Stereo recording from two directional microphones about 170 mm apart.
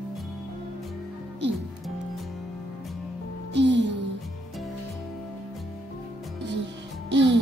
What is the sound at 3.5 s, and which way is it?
Music, 90° right.